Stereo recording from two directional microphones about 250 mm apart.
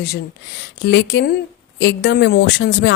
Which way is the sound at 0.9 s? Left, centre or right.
Left.